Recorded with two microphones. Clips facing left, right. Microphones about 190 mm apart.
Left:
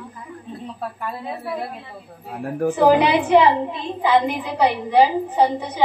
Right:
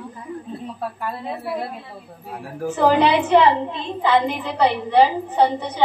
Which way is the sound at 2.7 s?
15° left (ahead or behind).